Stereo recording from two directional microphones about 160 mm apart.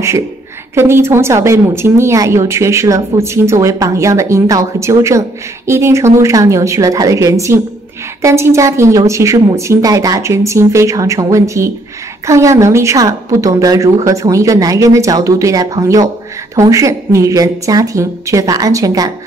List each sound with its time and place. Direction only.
0.7 s a woman's voice: 15° right (ahead or behind)